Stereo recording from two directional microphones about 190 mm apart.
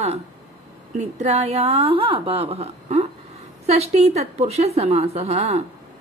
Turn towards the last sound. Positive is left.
turn(degrees=-35)  # may be behind; listen again after turning